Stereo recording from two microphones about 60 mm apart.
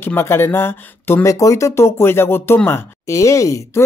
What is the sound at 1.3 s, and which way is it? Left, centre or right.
Speech, left.